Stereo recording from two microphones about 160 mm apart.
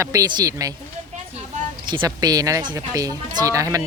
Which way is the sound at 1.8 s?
30° right (ahead or behind).